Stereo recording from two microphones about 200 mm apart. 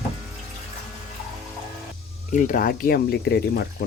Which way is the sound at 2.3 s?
40° left (ahead or behind).